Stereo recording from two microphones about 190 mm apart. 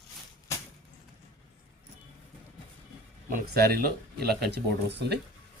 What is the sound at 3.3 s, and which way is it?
Speech, 50° right (ahead or behind).